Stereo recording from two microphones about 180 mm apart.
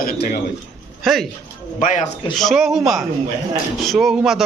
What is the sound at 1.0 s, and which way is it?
Speech, centre (ahead or behind).